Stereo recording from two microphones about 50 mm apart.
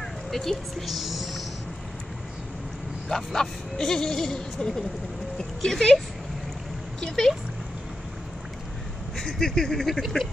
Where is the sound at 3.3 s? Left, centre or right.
Centre.